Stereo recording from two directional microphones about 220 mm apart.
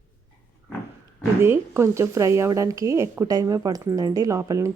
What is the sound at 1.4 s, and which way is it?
A woman's voice, 10° right (ahead or behind).